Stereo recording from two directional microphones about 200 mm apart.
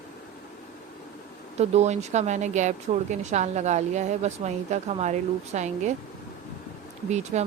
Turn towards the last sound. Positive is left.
turn(degrees=-35)  # may be behind; listen again after turning